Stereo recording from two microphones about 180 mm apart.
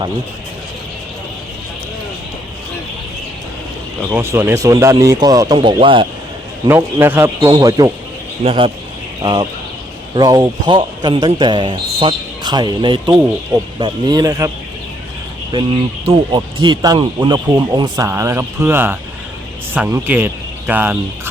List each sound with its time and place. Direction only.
4.1 s speech: 10° right (ahead or behind); by 6.1 s 30° right (ahead or behind)
6.7 s speech: 15° right (ahead or behind)
8.4 s a man's voice: 30° right (ahead or behind)
15.5 s speech: 25° right (ahead or behind); by 21.0 s 10° right (ahead or behind)